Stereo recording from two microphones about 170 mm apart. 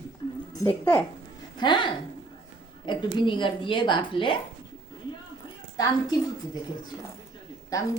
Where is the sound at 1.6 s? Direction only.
25° left (ahead or behind).